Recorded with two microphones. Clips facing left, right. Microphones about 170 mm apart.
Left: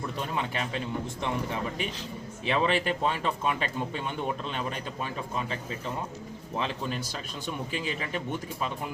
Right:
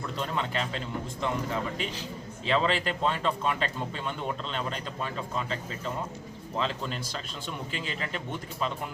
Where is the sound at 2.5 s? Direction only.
15° left (ahead or behind).